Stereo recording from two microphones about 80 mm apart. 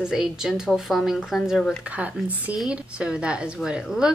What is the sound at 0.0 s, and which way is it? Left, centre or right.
A woman's voice, centre.